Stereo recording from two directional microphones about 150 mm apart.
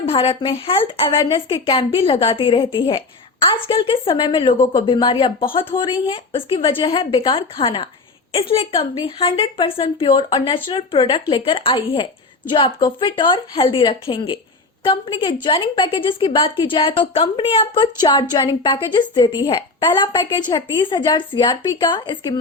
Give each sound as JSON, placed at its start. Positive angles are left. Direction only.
{"t": 0.0, "sound": "a woman's voice", "side_deg": 40}